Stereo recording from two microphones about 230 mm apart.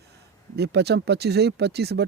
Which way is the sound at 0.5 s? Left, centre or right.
Right.